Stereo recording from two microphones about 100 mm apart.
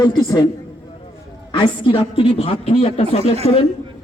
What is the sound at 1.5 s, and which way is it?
A man's voice, 65° left (ahead or behind).